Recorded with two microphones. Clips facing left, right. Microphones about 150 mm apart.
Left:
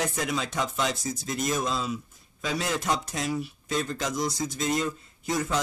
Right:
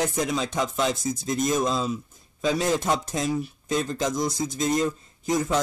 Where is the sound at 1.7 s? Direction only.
40° right (ahead or behind).